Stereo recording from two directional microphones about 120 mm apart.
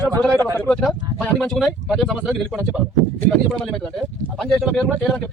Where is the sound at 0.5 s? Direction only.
10° left (ahead or behind).